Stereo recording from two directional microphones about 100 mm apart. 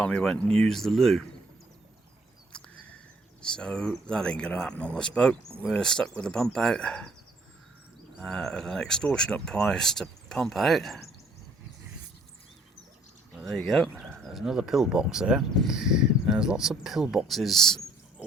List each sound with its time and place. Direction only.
0.0 s speech: 10° left (ahead or behind)
2.5 s a sound: 10° left (ahead or behind)
3.4 s speech: 10° left (ahead or behind)
8.2 s speech: 5° left (ahead or behind)
13.4 s speech: centre (ahead or behind)